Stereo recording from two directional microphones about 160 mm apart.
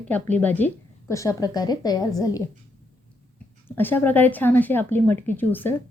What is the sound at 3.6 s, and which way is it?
A woman's voice, 10° left (ahead or behind).